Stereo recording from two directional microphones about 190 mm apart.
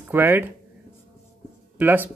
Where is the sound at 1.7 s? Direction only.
10° right (ahead or behind).